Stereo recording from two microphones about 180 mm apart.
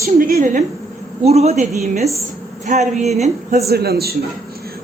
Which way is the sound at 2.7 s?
45° right (ahead or behind).